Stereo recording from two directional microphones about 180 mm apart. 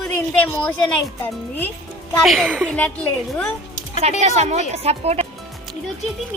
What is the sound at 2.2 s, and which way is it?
Speech, centre (ahead or behind).